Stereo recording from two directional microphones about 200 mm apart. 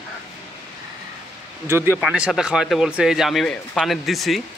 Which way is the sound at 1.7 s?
10° right (ahead or behind).